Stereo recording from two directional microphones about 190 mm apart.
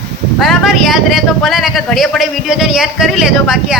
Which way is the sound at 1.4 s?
Centre (ahead or behind).